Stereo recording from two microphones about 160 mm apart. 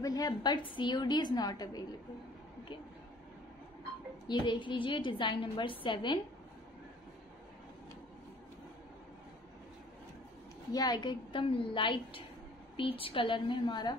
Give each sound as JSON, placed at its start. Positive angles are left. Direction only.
{"t": 0.0, "sound": "a woman's voice", "side_deg": 25}
{"t": 4.3, "sound": "a woman's voice", "side_deg": 30}
{"t": 10.7, "sound": "a woman's voice", "side_deg": 25}